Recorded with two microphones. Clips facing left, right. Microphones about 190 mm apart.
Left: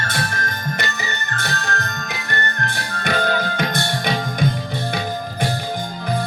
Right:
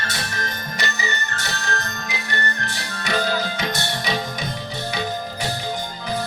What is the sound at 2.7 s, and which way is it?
Music, 55° left (ahead or behind).